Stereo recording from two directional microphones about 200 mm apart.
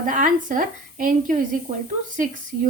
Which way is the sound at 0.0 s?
40° right (ahead or behind).